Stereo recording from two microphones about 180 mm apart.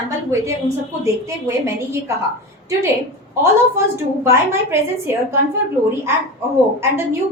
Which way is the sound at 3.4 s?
15° right (ahead or behind).